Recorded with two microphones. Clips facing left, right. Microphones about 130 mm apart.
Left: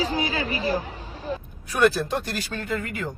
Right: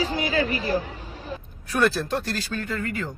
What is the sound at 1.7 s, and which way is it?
Speech, 15° left (ahead or behind).